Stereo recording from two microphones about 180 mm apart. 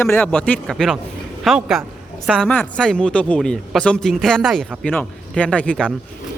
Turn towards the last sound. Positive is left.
turn(degrees=5)  # may be behind; listen again after turning